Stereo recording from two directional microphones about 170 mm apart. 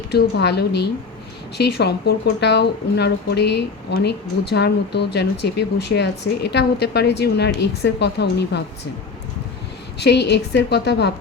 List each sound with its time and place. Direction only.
0.1 s a woman's voice: 75° left (ahead or behind)
10.0 s a woman's voice: 80° left